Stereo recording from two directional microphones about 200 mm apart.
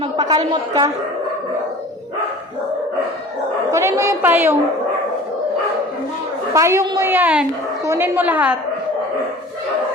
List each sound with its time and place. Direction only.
0.0 s a woman's voice: 20° right (ahead or behind)
3.7 s a woman's voice: 15° right (ahead or behind)
6.5 s a woman's voice: 15° right (ahead or behind)